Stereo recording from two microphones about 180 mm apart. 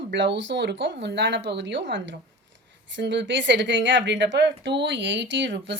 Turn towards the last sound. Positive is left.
turn(degrees=-80)